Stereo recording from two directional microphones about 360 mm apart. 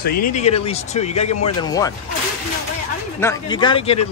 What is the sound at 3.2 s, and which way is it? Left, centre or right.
Speech, centre.